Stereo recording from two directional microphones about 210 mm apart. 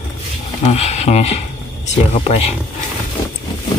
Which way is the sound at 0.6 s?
30° left (ahead or behind).